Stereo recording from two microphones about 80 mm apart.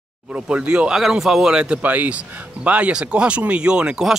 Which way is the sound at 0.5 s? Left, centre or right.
Centre.